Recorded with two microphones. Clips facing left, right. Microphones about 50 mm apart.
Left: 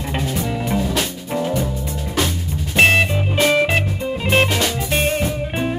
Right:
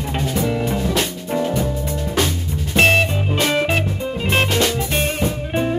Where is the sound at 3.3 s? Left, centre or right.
Centre.